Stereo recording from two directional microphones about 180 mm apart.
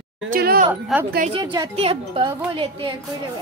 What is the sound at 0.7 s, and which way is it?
Speech, 10° right (ahead or behind).